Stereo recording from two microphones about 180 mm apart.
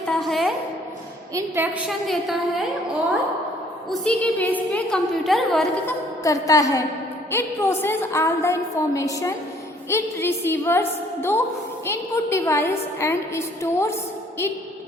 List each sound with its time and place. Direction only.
0.1 s a sound: centre (ahead or behind)
1.3 s a woman's voice: 15° right (ahead or behind)
1.9 s a woman's voice: centre (ahead or behind)
3.8 s a woman's voice: 5° left (ahead or behind)
6.2 s a woman's voice: 20° left (ahead or behind)